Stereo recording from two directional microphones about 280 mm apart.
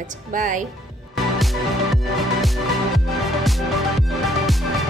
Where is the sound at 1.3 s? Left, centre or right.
Centre.